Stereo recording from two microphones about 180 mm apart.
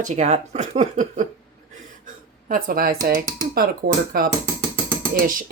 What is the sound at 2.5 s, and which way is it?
Speech, 50° right (ahead or behind).